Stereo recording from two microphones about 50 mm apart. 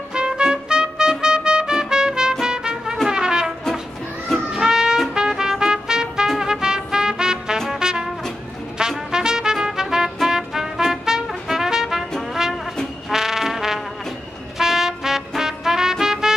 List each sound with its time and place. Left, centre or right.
0.1 s trumpet: centre
2.4 s music: centre
3.1 s brass instrument: centre
4.5 s music: centre
5.1 s trumpet: centre
7.5 s music: centre
10.2 s trumpet: centre
13.1 s trombone: centre
14.6 s music: centre